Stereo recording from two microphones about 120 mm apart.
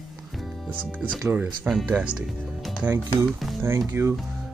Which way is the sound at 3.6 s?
25° right (ahead or behind).